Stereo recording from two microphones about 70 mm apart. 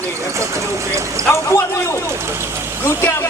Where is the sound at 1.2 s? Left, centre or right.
Left.